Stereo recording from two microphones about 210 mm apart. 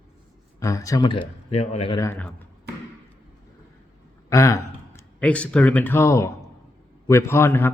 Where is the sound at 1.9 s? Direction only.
10° left (ahead or behind).